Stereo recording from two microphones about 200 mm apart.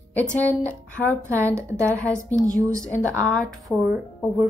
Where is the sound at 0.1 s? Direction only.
10° left (ahead or behind).